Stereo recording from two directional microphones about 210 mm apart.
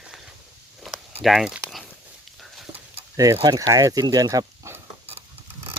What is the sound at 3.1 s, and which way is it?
Speech, 15° right (ahead or behind).